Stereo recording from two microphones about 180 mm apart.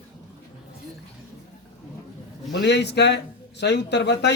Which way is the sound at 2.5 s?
75° left (ahead or behind).